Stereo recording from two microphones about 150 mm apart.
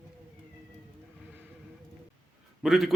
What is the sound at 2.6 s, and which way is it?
Speech, centre (ahead or behind).